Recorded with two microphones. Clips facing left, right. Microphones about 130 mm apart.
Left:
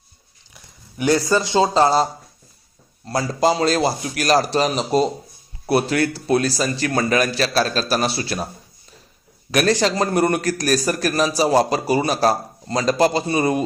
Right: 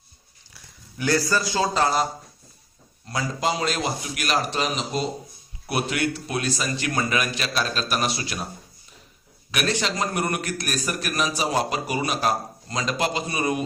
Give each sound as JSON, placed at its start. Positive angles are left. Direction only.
{"t": 0.5, "sound": "speech", "side_deg": 20}
{"t": 3.1, "sound": "a man's voice", "side_deg": 35}
{"t": 9.5, "sound": "a man's voice", "side_deg": 40}